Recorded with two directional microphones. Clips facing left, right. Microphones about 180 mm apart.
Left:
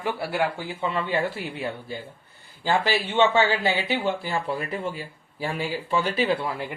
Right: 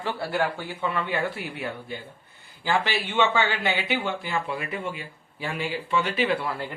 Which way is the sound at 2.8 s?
35° left (ahead or behind).